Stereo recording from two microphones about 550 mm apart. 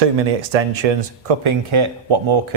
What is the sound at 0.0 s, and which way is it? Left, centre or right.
Speech, right.